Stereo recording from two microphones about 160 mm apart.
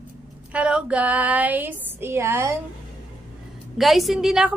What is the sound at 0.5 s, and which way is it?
A woman's voice, 5° right (ahead or behind).